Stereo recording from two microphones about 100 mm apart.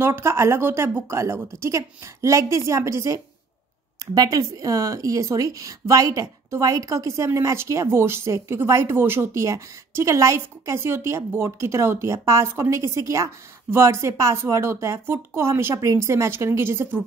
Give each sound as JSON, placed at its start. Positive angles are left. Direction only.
{"t": 0.0, "sound": "a woman's voice", "side_deg": -25}
{"t": 4.0, "sound": "speech", "side_deg": -40}